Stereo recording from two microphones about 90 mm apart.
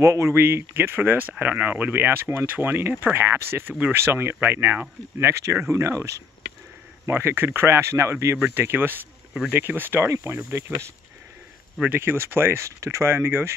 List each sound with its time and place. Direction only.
0.0 s speech: 30° right (ahead or behind)